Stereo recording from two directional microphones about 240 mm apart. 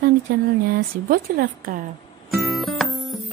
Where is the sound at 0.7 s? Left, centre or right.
Right.